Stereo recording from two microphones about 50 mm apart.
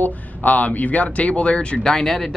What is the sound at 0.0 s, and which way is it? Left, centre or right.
Speech, left.